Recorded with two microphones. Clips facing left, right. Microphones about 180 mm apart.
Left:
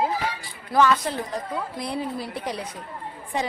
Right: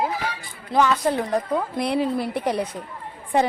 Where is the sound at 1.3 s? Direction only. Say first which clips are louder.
Right 7 dB; 65° right (ahead or behind).